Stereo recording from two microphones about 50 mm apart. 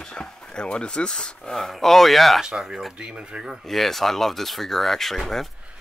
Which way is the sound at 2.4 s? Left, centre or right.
Centre.